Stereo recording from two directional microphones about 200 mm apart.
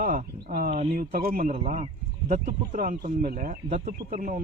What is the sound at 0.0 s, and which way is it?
Speech, 40° right (ahead or behind).